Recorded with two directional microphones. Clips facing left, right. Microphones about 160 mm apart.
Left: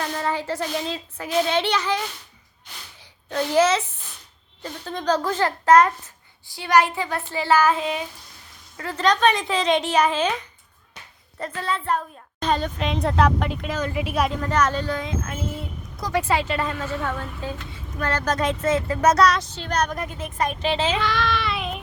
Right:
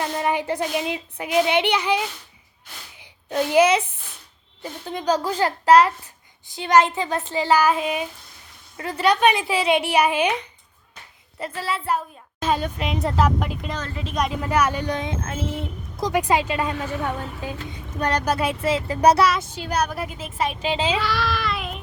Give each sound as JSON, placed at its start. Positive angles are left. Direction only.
{"t": 0.0, "sound": "a woman's voice", "side_deg": -20}
{"t": 5.5, "sound": "a child's voice", "side_deg": -30}
{"t": 6.5, "sound": "a woman's voice", "side_deg": -20}
{"t": 14.4, "sound": "a woman's voice", "side_deg": -10}
{"t": 21.1, "sound": "child singing", "side_deg": 0}